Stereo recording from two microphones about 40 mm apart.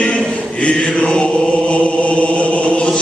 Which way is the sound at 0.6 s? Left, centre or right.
Left.